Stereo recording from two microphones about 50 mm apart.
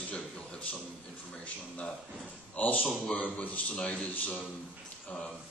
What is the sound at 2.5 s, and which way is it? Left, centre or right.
Speech, left.